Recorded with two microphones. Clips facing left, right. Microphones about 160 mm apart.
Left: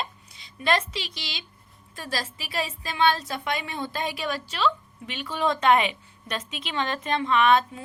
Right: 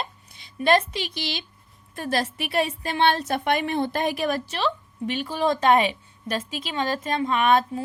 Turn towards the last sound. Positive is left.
turn(degrees=-45)  # may be behind; listen again after turning